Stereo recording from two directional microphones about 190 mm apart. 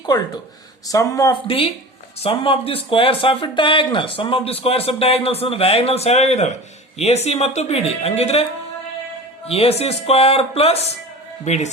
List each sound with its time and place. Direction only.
0.9 s speech: 20° left (ahead or behind)
1.5 s speech: 30° left (ahead or behind)
9.5 s speech: 35° left (ahead or behind)